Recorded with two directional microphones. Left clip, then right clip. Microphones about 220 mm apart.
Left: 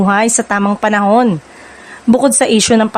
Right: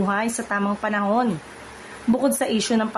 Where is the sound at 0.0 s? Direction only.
45° left (ahead or behind).